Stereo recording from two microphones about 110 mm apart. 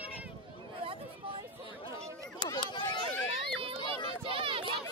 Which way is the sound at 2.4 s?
45° left (ahead or behind).